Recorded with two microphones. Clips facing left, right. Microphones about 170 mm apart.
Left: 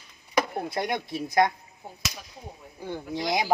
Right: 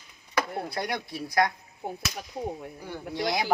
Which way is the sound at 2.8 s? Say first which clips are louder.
Left 1 dB; 20° left (ahead or behind).